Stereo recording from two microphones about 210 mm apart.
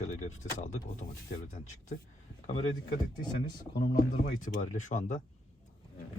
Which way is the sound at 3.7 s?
45° left (ahead or behind).